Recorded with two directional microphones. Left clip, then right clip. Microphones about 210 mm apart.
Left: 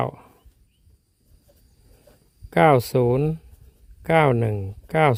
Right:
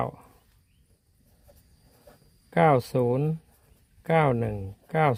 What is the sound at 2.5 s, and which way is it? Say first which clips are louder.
Speech: left 5 dB; 35° left (ahead or behind).